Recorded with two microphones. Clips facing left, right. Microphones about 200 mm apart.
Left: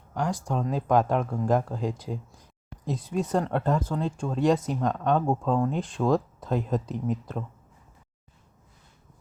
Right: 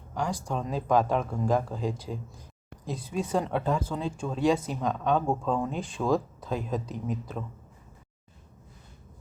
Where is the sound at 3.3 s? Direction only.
10° right (ahead or behind).